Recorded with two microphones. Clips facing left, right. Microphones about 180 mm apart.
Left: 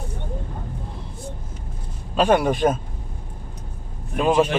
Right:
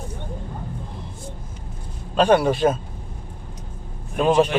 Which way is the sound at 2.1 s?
10° left (ahead or behind).